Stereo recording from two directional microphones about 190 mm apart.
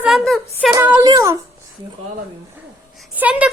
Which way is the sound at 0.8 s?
10° right (ahead or behind).